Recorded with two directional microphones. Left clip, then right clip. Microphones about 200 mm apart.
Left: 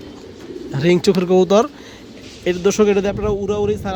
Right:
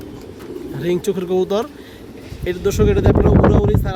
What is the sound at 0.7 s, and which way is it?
Speech, 35° left (ahead or behind).